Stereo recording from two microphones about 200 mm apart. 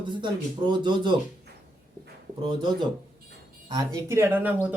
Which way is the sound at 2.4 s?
25° right (ahead or behind).